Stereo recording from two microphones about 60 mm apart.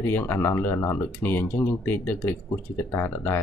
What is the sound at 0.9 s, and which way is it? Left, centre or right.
Speech, left.